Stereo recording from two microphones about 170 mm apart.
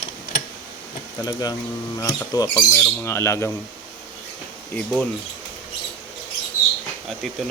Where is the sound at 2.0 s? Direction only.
20° left (ahead or behind).